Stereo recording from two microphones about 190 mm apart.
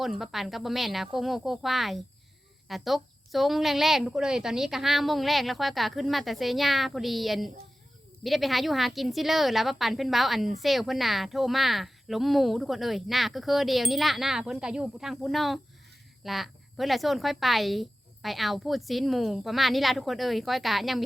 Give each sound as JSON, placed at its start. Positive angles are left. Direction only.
{"t": 0.0, "sound": "speech", "side_deg": 0}